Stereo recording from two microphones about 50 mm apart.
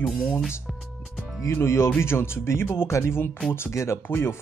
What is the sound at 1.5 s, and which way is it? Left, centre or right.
Speech, left.